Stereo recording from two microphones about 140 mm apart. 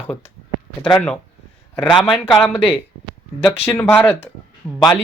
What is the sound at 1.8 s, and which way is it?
Speech, 30° left (ahead or behind).